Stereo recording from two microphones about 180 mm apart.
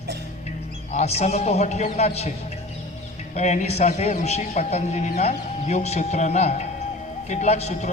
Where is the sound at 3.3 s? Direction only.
35° left (ahead or behind).